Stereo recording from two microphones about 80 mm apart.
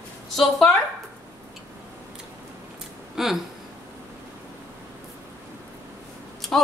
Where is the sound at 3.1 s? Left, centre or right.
Centre.